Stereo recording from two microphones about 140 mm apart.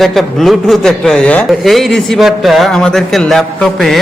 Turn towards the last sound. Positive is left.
turn(degrees=0)  # may be behind; listen again after turning